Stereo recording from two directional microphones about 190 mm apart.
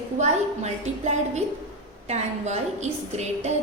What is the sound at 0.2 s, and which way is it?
A woman's voice, 35° right (ahead or behind).